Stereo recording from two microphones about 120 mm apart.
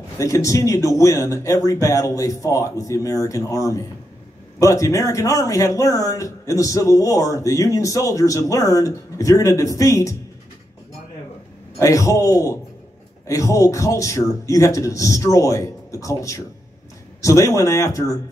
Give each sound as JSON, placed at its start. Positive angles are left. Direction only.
{"t": 0.2, "sound": "speech", "side_deg": 25}
{"t": 11.8, "sound": "speech", "side_deg": 25}